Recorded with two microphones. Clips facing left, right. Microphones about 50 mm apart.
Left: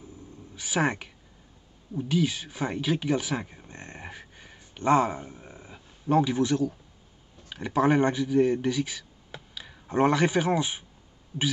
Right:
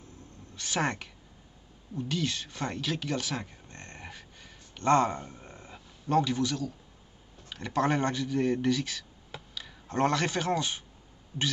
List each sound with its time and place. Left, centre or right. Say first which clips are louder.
0.6 s speech: left 4 dB; centre
2.0 s a sound: left 5 dB; centre
6.3 s a man's voice: left 6 dB; left
7.4 s a man's voice: left 4 dB; centre